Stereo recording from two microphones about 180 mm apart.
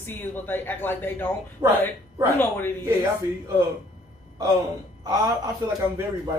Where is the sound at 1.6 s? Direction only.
25° right (ahead or behind).